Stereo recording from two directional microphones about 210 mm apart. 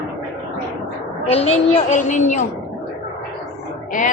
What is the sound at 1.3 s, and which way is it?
A woman's voice, 30° left (ahead or behind).